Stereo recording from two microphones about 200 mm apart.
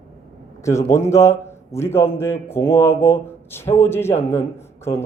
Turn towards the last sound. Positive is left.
turn(degrees=15)  # may be behind; listen again after turning